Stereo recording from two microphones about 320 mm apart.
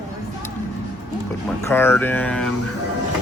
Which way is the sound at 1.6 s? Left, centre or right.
Centre.